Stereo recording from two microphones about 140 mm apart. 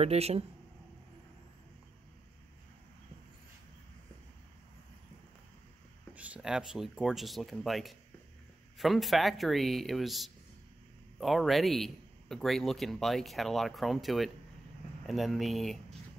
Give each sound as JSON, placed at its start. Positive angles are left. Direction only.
{"t": 0.0, "sound": "speech", "side_deg": -50}
{"t": 6.1, "sound": "speech", "side_deg": -10}